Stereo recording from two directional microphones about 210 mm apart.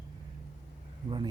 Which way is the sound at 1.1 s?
25° right (ahead or behind).